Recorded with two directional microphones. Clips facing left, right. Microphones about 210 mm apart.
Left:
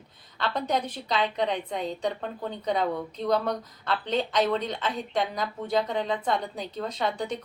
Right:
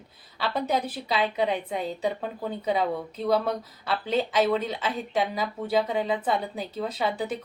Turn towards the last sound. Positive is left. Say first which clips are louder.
# right 1 dB
turn(degrees=-5)  # may be behind; listen again after turning